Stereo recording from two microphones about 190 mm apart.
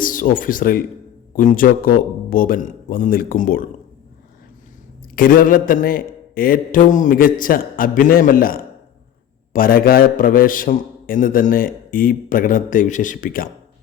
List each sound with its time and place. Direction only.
0.0 s a man's voice: 45° left (ahead or behind)
5.1 s a man's voice: 45° left (ahead or behind)